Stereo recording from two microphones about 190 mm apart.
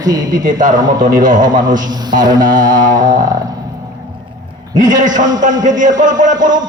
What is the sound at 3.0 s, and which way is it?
Speech, 20° right (ahead or behind).